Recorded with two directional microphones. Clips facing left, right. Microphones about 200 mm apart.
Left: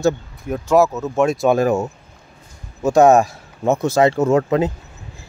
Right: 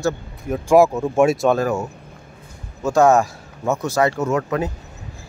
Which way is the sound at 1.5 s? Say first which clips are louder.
Left 3 dB; 20° left (ahead or behind).